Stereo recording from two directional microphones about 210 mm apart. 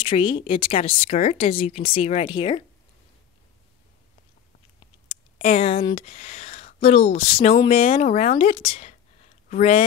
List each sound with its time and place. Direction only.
0.0 s speech: 25° left (ahead or behind)
5.0 s speech: 25° left (ahead or behind)